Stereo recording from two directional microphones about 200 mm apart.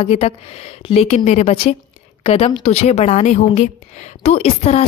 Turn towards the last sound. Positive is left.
turn(degrees=30)  # may be behind; listen again after turning